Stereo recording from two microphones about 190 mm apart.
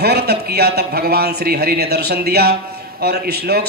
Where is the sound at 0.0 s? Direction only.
55° right (ahead or behind).